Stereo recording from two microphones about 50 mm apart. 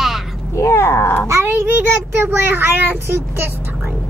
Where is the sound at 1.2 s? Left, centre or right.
Right.